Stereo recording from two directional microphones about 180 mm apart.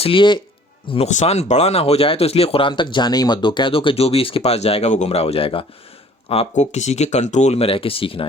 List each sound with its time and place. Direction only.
0.0 s speech: 30° left (ahead or behind)